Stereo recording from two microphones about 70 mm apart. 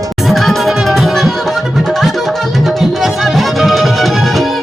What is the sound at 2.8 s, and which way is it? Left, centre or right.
Music, centre.